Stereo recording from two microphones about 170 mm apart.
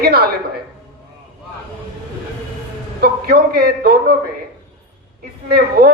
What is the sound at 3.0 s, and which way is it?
A man's voice, 65° right (ahead or behind).